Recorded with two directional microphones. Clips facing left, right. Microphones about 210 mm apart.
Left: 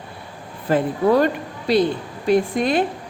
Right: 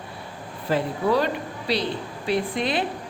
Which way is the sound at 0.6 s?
50° left (ahead or behind).